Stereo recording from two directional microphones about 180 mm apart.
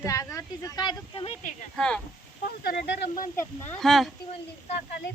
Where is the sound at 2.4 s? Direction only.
60° left (ahead or behind).